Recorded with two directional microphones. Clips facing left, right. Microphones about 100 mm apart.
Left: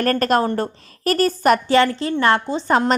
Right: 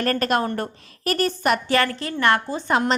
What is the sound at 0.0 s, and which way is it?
A woman's voice, 40° left (ahead or behind).